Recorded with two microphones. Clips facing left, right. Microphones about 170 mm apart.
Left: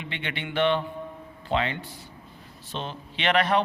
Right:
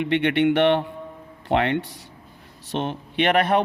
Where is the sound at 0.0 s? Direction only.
65° right (ahead or behind).